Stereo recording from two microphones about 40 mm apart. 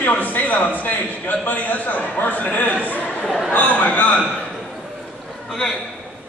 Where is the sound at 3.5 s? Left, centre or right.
Left.